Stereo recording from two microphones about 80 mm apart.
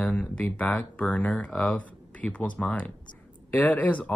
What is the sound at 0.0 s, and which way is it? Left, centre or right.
Speech, centre.